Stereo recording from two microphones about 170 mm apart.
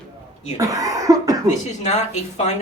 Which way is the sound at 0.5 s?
20° right (ahead or behind).